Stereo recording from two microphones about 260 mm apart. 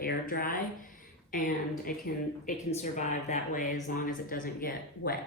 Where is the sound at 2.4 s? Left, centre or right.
Left.